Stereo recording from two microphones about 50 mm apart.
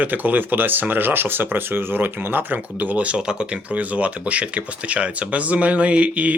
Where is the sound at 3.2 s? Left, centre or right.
Centre.